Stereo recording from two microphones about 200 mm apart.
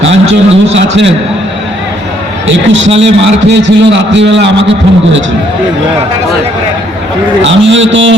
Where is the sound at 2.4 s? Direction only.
70° right (ahead or behind).